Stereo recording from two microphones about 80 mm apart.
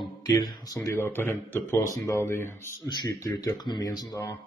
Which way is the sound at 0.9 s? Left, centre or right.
Left.